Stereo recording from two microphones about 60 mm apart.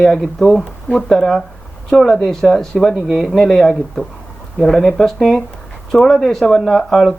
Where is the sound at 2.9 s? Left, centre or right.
Centre.